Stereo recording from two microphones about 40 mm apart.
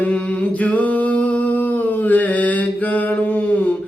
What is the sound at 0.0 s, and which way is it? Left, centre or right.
Singing, left.